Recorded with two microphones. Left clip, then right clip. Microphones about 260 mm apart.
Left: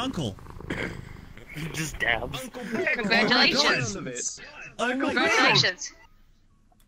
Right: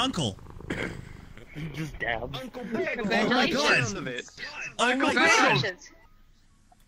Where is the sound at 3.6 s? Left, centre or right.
Centre.